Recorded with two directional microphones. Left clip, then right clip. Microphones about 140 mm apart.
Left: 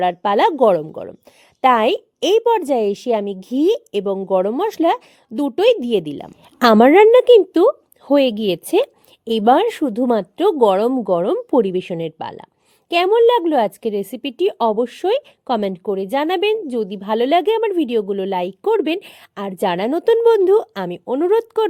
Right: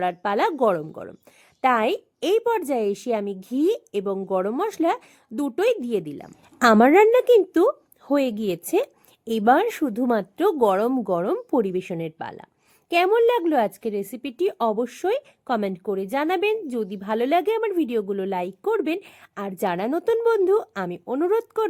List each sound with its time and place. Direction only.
0.0 s a woman's voice: 40° left (ahead or behind)